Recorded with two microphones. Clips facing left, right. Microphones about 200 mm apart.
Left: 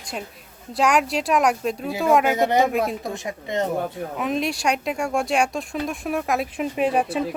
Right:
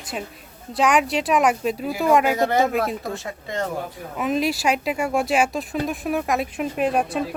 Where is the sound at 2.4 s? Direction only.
15° left (ahead or behind).